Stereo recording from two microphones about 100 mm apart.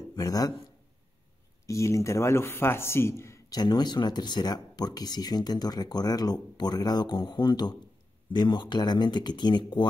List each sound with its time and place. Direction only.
0.1 s speech: 35° left (ahead or behind)
1.7 s speech: 30° left (ahead or behind); by 9.8 s 50° left (ahead or behind)